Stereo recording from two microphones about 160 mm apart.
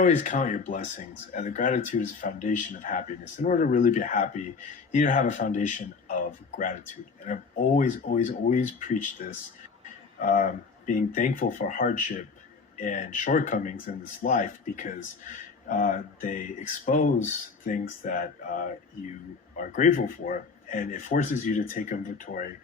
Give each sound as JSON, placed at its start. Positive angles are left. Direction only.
{"t": 0.0, "sound": "speech", "side_deg": 50}